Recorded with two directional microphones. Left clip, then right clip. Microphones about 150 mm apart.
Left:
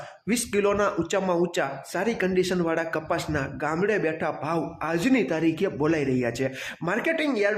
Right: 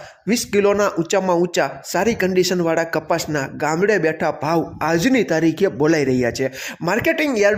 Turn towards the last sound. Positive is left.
turn(degrees=-40)  # may be behind; listen again after turning